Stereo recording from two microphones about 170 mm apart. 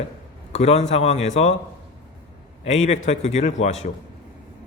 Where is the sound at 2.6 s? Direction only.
40° left (ahead or behind).